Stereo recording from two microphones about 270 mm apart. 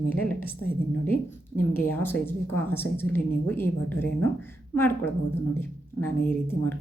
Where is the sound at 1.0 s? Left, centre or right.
Centre.